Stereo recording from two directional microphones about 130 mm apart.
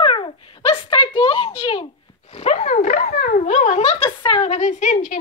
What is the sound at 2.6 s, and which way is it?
Dog, 85° left.